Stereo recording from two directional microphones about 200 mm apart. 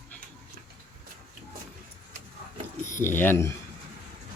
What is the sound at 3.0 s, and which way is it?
Speech, 10° left (ahead or behind).